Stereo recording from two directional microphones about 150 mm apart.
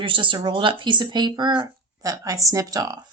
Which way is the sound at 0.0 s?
35° right (ahead or behind).